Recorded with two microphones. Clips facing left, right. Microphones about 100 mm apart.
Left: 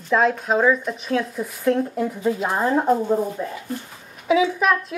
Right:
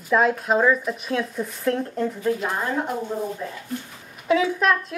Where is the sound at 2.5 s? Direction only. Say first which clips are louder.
Left 7 dB; 30° left (ahead or behind).